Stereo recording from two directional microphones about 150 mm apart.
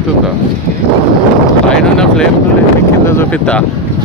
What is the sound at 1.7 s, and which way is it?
Speech, 5° left (ahead or behind).